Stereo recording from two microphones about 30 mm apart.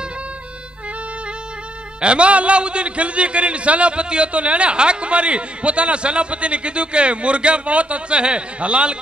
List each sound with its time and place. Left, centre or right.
2.0 s a man's voice: right